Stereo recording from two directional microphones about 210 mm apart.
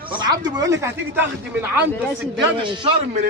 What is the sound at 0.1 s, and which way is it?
Speech, 20° right (ahead or behind).